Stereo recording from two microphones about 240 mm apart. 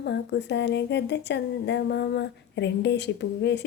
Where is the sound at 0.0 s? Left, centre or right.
Left.